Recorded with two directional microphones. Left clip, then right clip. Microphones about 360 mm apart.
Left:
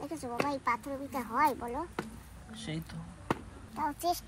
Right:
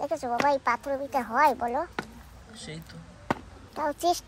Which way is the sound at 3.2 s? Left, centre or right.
Right.